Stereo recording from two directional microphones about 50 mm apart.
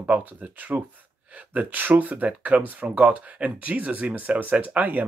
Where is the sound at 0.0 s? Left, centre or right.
Right.